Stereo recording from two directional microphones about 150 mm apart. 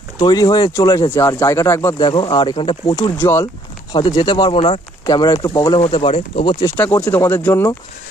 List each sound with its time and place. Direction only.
0.2 s speech: 30° left (ahead or behind)
2.0 s speech: 35° left (ahead or behind)
3.0 s speech: 20° left (ahead or behind)
3.9 s speech: 30° left (ahead or behind)
6.8 s speech: 10° left (ahead or behind)